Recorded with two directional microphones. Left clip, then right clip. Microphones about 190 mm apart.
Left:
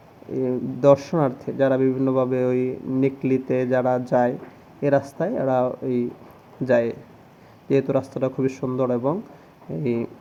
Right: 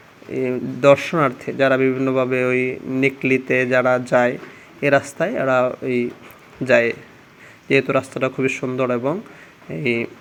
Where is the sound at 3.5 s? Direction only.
15° right (ahead or behind).